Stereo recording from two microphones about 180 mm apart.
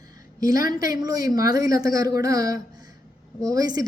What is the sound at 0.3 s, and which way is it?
A woman's voice, 20° right (ahead or behind).